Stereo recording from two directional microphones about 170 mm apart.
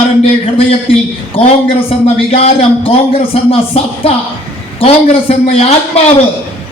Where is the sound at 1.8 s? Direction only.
35° left (ahead or behind).